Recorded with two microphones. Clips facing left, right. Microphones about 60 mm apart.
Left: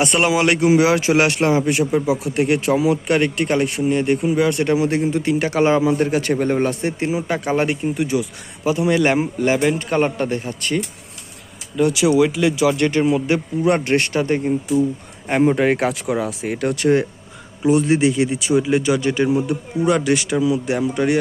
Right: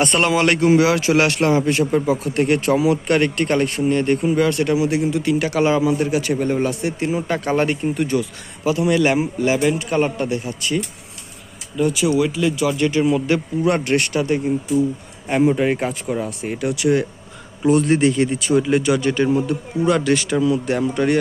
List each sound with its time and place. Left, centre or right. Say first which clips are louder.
0.0 s a man's voice: even; centre
4.4 s speech: even; left
4.7 s a man's voice: left 1 dB; left
7.1 s a man's voice: right 1 dB; centre
8.6 s a man's voice: even; left
11.8 s speech: left 3 dB; left
13.1 s a man's voice: even; left
16.6 s speech: left 1 dB; left
17.6 s a man's voice: even; centre
20.3 s a man's voice: even; centre